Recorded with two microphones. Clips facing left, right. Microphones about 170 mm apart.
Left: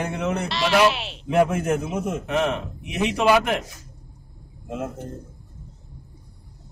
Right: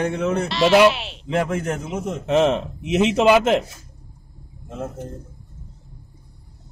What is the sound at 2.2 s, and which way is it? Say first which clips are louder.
A man's voice: right 10 dB; 20° right (ahead or behind).